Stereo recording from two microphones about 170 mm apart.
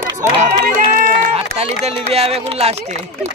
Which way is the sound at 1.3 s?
35° right (ahead or behind).